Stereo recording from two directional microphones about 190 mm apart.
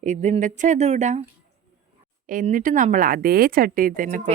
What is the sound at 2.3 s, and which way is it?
A woman's voice, 45° right (ahead or behind).